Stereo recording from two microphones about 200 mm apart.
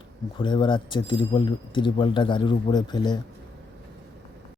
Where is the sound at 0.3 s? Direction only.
25° left (ahead or behind).